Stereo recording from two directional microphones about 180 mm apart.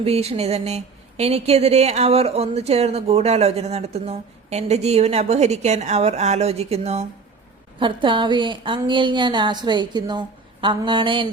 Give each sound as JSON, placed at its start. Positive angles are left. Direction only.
{"t": 0.0, "sound": "a woman's voice", "side_deg": -35}